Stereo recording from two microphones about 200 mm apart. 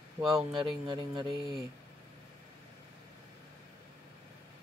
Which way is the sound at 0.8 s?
20° right (ahead or behind).